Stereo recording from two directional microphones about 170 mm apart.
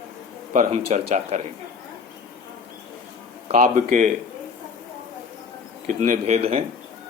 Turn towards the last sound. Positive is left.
turn(degrees=-35)  # may be behind; listen again after turning